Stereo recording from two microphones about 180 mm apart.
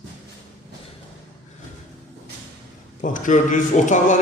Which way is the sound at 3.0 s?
45° left (ahead or behind).